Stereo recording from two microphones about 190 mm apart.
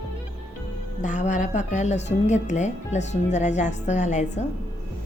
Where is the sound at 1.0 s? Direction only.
40° left (ahead or behind).